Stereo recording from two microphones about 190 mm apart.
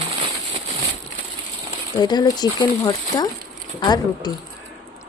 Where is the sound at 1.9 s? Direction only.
20° left (ahead or behind).